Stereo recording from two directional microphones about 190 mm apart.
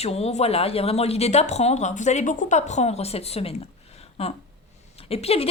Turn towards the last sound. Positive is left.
turn(degrees=30)  # may be behind; listen again after turning